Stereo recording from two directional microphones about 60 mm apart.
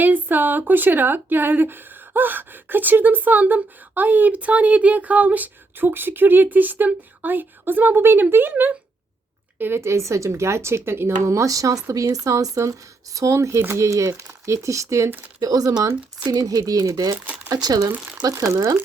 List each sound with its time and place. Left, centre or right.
0.0 s a woman's voice: right
9.8 s speech: right
15.4 s speech: right
17.2 s speech: right
17.5 s speech: right
18.3 s speech: right